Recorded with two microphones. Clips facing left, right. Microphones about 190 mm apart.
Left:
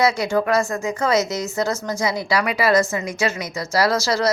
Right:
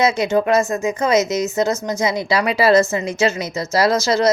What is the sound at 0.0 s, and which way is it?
A woman's voice, 20° right (ahead or behind).